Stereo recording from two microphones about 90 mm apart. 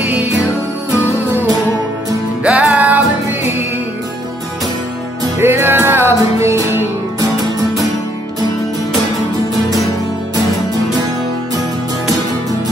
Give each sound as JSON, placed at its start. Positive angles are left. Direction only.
{"t": 2.4, "sound": "music", "side_deg": -15}
{"t": 5.4, "sound": "music", "side_deg": -25}